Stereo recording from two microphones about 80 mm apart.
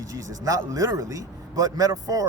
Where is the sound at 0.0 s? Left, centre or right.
Right.